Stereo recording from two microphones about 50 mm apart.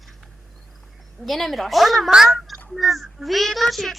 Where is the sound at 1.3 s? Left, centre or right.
Centre.